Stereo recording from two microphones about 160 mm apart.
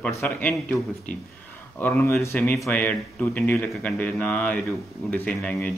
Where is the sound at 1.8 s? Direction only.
15° left (ahead or behind).